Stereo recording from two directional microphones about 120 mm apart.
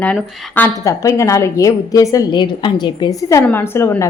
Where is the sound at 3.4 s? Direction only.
15° left (ahead or behind).